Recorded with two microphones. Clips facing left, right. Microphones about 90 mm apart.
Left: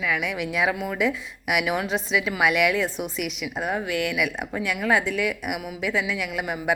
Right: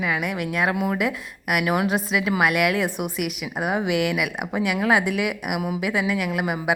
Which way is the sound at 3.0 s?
55° right (ahead or behind).